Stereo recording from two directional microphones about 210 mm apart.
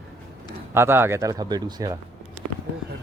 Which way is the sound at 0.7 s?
10° right (ahead or behind).